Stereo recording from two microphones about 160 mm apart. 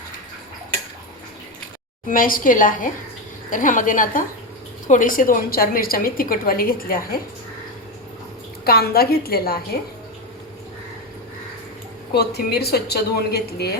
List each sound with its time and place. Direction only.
2.0 s a woman's voice: 60° left (ahead or behind)
8.6 s a woman's voice: 75° left (ahead or behind)
12.1 s a woman's voice: 90° left